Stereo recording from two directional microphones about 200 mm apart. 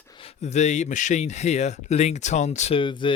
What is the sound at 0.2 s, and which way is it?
Speech, 35° left (ahead or behind).